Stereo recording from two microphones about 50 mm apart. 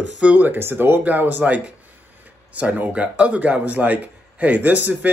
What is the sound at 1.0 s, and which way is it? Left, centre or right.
Speech, right.